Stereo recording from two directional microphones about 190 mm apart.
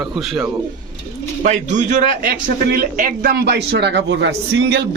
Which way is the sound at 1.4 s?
40° right (ahead or behind).